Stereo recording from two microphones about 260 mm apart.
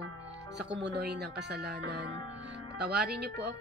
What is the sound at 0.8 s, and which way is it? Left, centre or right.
Speech, right.